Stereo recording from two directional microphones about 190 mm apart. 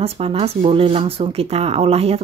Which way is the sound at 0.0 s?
30° right (ahead or behind).